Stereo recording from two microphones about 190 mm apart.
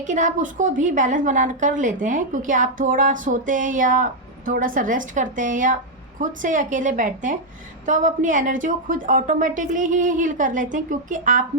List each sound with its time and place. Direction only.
0.0 s a woman's voice: 40° right (ahead or behind)